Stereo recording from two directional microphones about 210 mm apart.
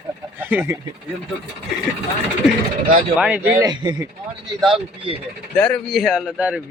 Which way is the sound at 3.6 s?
20° right (ahead or behind).